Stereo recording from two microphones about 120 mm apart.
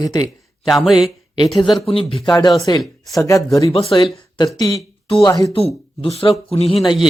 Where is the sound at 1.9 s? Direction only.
50° left (ahead or behind).